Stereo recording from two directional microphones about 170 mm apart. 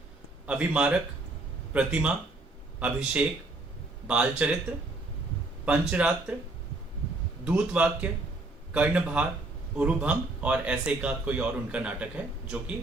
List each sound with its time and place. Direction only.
0.4 s a man's voice: 5° right (ahead or behind)
5.9 s a man's voice: 5° right (ahead or behind)
7.4 s a man's voice: 5° right (ahead or behind)